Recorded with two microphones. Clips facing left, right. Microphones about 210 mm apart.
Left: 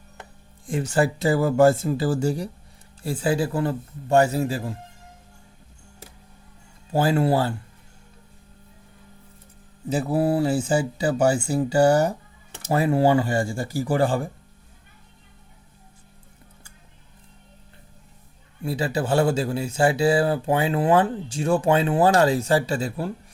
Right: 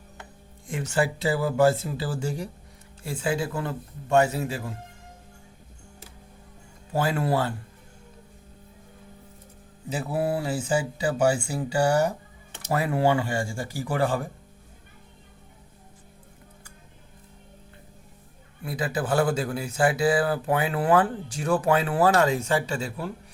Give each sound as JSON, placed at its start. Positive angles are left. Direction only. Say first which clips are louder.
{"t": 0.7, "sound": "speech", "louder": "left 4 dB", "side_deg": 35}
{"t": 6.9, "sound": "speech", "louder": "left 5 dB", "side_deg": 30}
{"t": 9.9, "sound": "speech", "louder": "left 5 dB", "side_deg": 35}
{"t": 18.6, "sound": "speech", "louder": "left 4 dB", "side_deg": 30}